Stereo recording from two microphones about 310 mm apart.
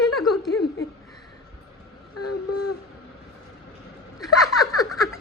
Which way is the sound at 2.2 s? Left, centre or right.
Left.